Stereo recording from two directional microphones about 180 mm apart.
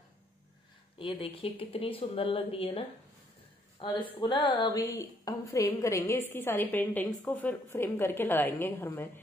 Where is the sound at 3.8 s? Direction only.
25° left (ahead or behind).